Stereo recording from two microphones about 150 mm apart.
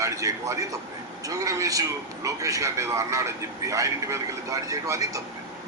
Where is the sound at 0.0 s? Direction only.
20° right (ahead or behind).